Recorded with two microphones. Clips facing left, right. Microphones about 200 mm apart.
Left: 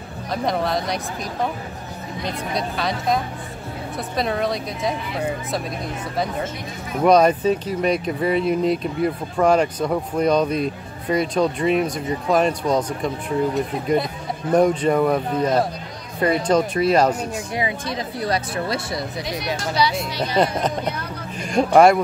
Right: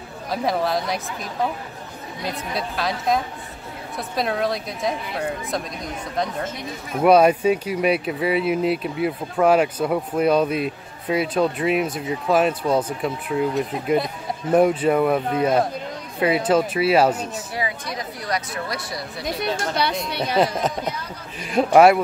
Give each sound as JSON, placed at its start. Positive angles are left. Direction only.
{"t": 0.3, "sound": "speech", "side_deg": 0}
{"t": 2.2, "sound": "speech", "side_deg": 0}
{"t": 7.0, "sound": "speech", "side_deg": -5}
{"t": 17.6, "sound": "speech", "side_deg": 25}
{"t": 19.2, "sound": "speech", "side_deg": -55}
{"t": 20.3, "sound": "speech", "side_deg": -5}